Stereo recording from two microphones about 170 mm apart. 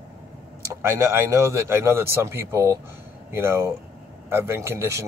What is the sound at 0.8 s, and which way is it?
Speech, 15° right (ahead or behind).